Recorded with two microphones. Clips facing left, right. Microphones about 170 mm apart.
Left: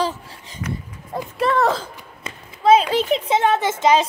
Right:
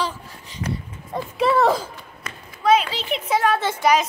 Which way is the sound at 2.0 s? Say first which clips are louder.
Left 1 dB; 25° left (ahead or behind).